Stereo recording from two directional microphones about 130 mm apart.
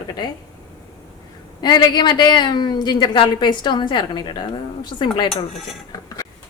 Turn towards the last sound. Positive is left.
turn(degrees=25)  # may be behind; listen again after turning